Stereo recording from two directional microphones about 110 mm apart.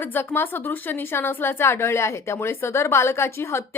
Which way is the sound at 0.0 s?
20° left (ahead or behind).